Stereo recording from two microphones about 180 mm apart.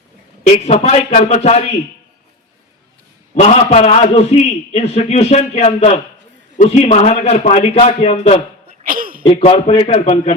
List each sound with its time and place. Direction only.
0.4 s a man's voice: 35° left (ahead or behind)
3.3 s a man's voice: 35° left (ahead or behind)
8.9 s a sound: 50° right (ahead or behind)
9.2 s a man's voice: 30° left (ahead or behind)